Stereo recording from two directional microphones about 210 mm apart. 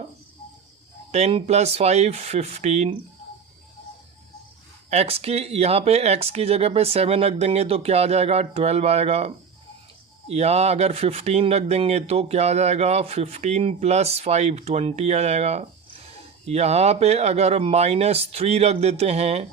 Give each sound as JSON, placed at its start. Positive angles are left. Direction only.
{"t": 1.1, "sound": "speech", "side_deg": -30}
{"t": 4.9, "sound": "speech", "side_deg": -30}